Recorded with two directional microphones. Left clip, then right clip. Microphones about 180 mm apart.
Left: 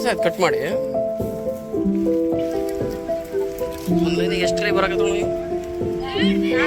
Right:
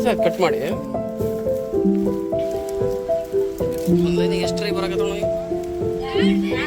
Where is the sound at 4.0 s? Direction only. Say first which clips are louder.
Even; 5° right (ahead or behind).